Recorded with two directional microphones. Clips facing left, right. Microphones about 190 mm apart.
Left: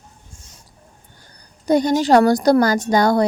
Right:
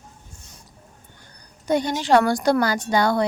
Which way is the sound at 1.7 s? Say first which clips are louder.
Left 5 dB; 40° left (ahead or behind).